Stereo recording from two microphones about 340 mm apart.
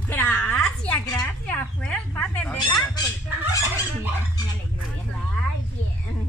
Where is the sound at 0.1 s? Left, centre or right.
Centre.